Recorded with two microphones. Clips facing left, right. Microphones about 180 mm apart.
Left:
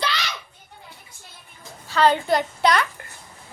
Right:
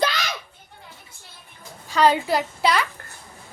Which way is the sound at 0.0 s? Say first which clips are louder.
Right 4 dB; 45° right (ahead or behind).